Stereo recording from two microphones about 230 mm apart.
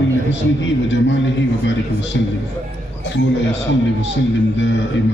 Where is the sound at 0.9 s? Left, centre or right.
Left.